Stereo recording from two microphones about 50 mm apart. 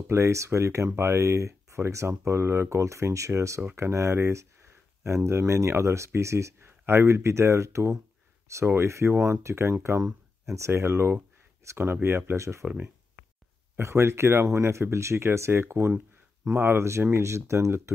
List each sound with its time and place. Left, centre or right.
0.1 s speech: right
3.7 s speech: right
10.4 s speech: right
10.7 s speech: right
12.4 s speech: right
13.7 s speech: right
17.0 s speech: right